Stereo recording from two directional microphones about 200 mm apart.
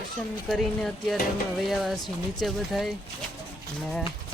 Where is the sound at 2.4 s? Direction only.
Centre (ahead or behind).